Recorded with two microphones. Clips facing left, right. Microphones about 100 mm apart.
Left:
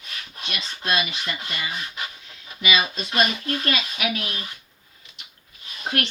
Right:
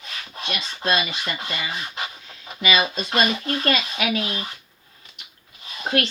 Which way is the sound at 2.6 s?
35° right (ahead or behind).